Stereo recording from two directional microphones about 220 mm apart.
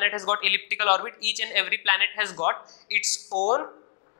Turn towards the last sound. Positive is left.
turn(degrees=35)  # may be behind; listen again after turning